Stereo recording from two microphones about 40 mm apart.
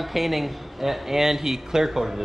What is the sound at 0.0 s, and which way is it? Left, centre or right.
Speech, centre.